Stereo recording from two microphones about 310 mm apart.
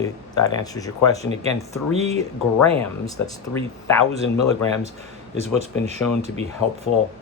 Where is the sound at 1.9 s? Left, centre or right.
Centre.